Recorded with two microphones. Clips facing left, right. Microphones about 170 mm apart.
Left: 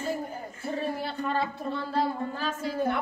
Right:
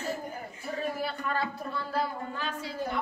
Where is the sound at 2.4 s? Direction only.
50° left (ahead or behind).